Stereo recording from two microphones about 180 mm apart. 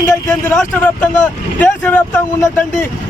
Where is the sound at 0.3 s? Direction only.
5° left (ahead or behind).